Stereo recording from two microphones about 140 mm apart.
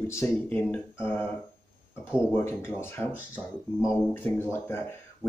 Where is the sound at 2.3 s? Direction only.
15° left (ahead or behind).